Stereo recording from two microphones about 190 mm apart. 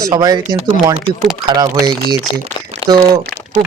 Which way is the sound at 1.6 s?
20° right (ahead or behind).